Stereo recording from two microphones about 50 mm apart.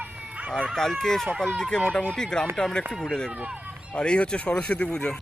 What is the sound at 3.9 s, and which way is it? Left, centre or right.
Speech, left.